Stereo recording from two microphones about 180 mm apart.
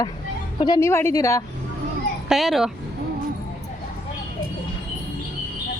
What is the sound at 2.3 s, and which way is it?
Speech, centre (ahead or behind).